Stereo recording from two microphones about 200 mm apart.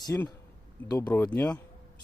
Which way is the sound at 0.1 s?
10° left (ahead or behind).